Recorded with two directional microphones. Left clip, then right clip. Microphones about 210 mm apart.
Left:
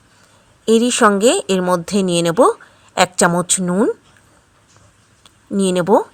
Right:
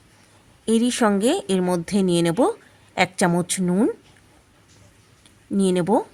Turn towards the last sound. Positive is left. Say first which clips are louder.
# left 6 dB
turn(degrees=20)  # may be behind; listen again after turning